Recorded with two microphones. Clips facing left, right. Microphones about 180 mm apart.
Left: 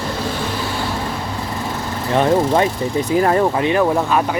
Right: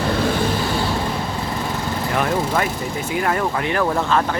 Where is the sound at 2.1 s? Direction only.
25° left (ahead or behind).